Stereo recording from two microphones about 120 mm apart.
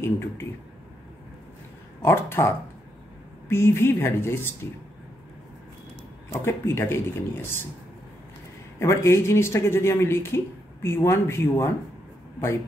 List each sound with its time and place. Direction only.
0.0 s speech: 20° left (ahead or behind)
2.0 s speech: 20° left (ahead or behind)
6.4 s speech: 20° left (ahead or behind)
8.7 s speech: 20° left (ahead or behind)